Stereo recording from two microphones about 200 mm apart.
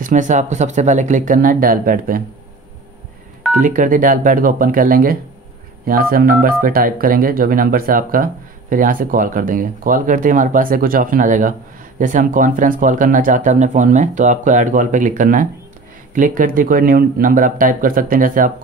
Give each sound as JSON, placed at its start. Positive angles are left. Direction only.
{"t": 0.0, "sound": "speech", "side_deg": -40}
{"t": 3.5, "sound": "speech", "side_deg": -40}